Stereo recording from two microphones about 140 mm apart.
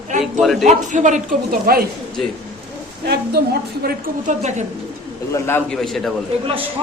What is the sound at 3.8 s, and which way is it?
Speech, 90° right.